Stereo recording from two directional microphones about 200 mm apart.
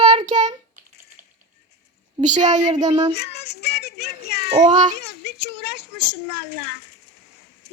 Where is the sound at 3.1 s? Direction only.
55° left (ahead or behind).